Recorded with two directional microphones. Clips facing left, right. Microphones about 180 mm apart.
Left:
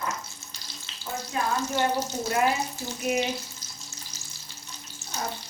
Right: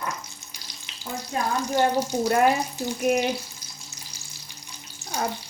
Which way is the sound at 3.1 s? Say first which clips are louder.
Right 4 dB; 50° right (ahead or behind).